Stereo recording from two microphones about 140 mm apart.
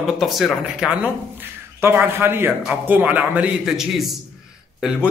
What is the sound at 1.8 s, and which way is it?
A man's voice, 15° right (ahead or behind).